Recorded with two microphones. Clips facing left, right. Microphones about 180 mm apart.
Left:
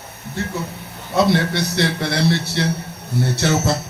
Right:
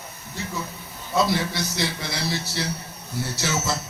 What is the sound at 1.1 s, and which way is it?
A man's voice, 65° left (ahead or behind).